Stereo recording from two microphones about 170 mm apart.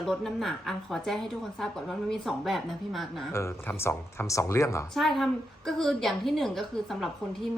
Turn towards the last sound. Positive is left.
turn(degrees=0)  # may be behind; listen again after turning